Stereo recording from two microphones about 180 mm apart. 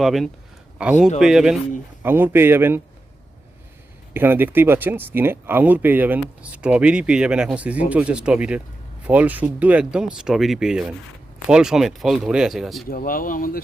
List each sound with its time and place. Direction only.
0.0 s speech: centre (ahead or behind)
4.1 s speech: 10° right (ahead or behind)
12.9 s speech: 55° left (ahead or behind)